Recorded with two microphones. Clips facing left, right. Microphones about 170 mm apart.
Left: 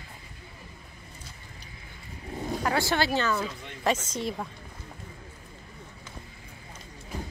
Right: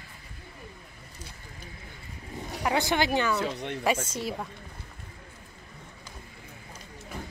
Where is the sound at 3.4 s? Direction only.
70° right (ahead or behind).